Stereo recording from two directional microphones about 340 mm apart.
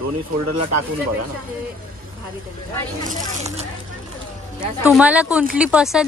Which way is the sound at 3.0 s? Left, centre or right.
Right.